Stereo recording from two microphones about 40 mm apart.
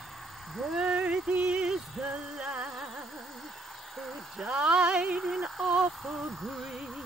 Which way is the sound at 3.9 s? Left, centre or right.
Centre.